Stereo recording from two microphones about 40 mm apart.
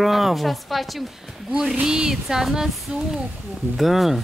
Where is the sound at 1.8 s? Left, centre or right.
Centre.